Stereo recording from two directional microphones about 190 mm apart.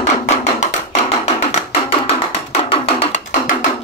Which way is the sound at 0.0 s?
40° left (ahead or behind).